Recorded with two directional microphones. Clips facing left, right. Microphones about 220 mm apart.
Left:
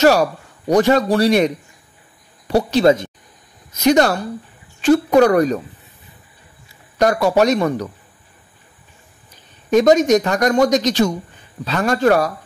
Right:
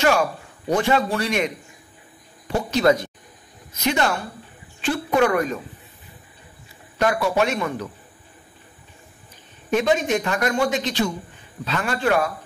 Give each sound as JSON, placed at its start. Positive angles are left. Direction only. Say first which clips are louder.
{"t": 0.0, "sound": "speech", "louder": "left 6 dB", "side_deg": 40}
{"t": 2.5, "sound": "speech", "louder": "left 5 dB", "side_deg": 30}
{"t": 3.8, "sound": "speech", "louder": "left 8 dB", "side_deg": 40}
{"t": 7.0, "sound": "speech", "louder": "left 6 dB", "side_deg": 40}
{"t": 9.7, "sound": "speech", "louder": "left 8 dB", "side_deg": 40}